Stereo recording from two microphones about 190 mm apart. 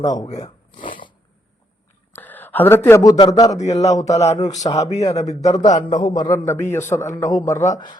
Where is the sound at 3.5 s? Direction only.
35° left (ahead or behind).